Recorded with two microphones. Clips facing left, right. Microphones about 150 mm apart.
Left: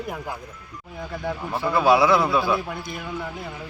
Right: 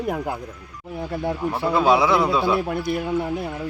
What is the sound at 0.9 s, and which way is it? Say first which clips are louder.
Speech: right 5 dB; 30° right (ahead or behind).